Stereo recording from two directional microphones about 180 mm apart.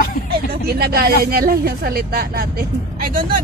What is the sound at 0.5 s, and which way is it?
Speech, 60° right (ahead or behind).